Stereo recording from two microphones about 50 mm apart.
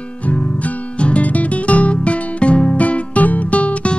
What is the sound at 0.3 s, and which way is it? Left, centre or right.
Music, left.